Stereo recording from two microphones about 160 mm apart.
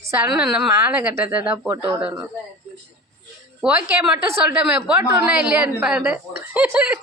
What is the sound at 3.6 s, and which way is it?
A woman's voice, 5° right (ahead or behind).